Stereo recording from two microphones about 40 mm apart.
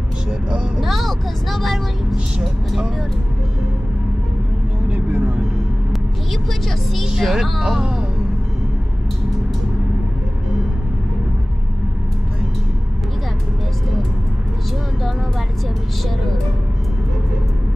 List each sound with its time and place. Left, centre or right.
0.7 s speech: centre
4.8 s vehicle: right
7.2 s speech: centre